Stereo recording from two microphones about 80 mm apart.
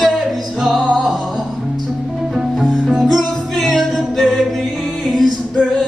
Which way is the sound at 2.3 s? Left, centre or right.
Centre.